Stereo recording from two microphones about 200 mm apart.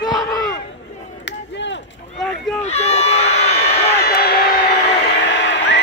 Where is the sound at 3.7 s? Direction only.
50° left (ahead or behind).